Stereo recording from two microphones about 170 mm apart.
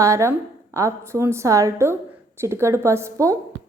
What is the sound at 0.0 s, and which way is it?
A woman's voice, 15° right (ahead or behind).